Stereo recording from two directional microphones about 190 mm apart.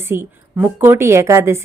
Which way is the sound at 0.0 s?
10° right (ahead or behind).